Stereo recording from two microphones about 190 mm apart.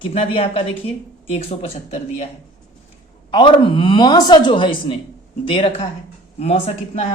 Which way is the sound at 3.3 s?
25° left (ahead or behind).